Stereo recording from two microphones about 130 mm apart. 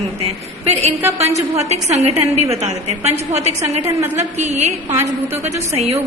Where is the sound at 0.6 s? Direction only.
55° right (ahead or behind).